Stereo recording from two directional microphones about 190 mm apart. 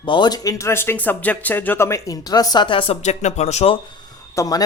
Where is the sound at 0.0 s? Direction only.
25° left (ahead or behind).